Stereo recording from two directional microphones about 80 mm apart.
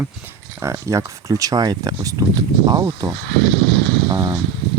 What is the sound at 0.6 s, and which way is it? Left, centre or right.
Speech, right.